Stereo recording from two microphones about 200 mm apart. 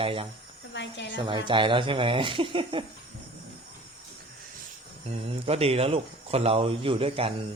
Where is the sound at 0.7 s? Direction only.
60° left (ahead or behind).